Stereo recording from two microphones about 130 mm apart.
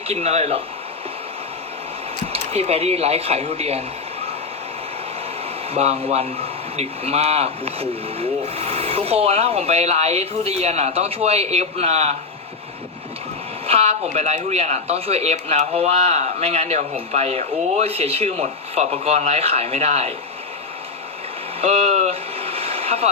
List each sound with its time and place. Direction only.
0.1 s speech: 55° right (ahead or behind)
2.2 s speech: 50° right (ahead or behind)
5.7 s speech: 50° right (ahead or behind)
13.7 s speech: 50° right (ahead or behind)
21.6 s a sound: 55° right (ahead or behind)